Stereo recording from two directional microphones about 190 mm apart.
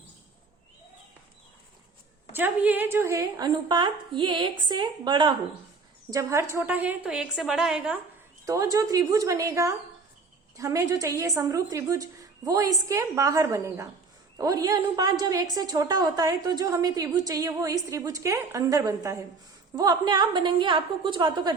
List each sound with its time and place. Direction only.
2.3 s a woman's voice: 10° right (ahead or behind)
8.4 s a woman's voice: 20° right (ahead or behind)